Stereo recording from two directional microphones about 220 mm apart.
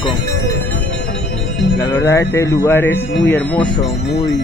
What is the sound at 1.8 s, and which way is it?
Speech, 15° left (ahead or behind).